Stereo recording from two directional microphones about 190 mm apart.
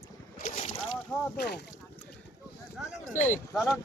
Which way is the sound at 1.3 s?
60° left (ahead or behind).